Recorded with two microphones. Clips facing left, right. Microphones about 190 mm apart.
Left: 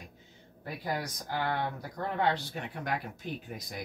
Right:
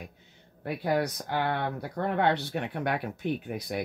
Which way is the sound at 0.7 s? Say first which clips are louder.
Right 8 dB; 65° right (ahead or behind).